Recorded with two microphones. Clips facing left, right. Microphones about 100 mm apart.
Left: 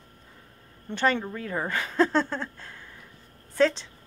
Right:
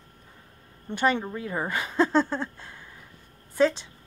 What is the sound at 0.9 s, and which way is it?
A woman's voice, 15° right (ahead or behind).